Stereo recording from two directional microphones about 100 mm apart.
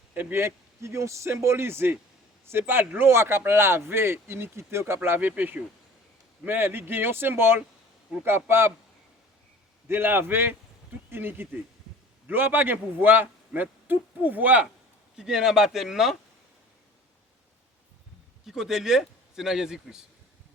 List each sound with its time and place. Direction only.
0.1 s a man's voice: 20° right (ahead or behind)
9.9 s a man's voice: 20° right (ahead or behind); by 16.1 s 5° right (ahead or behind)
18.4 s a man's voice: 5° right (ahead or behind)